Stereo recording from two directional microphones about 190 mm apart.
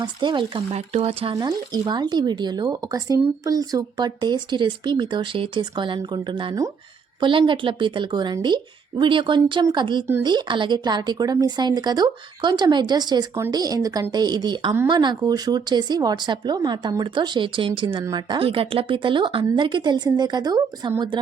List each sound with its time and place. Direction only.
0.0 s speech: 25° right (ahead or behind)